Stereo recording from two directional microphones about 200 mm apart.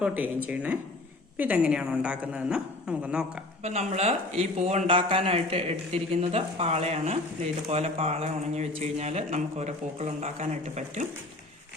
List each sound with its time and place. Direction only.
0.0 s a woman's voice: 10° right (ahead or behind)
3.6 s speech: 30° right (ahead or behind)